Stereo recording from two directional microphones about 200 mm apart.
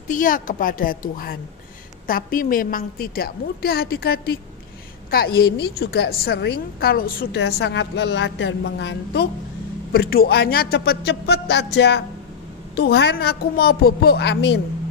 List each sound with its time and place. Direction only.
0.1 s a woman's voice: 40° left (ahead or behind); by 14.6 s 60° left (ahead or behind)